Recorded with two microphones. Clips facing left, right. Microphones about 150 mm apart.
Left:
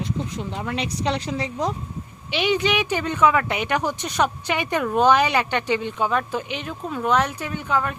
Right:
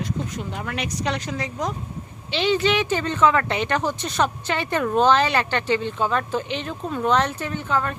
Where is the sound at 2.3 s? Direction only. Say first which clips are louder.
Right 1 dB; 15° left (ahead or behind).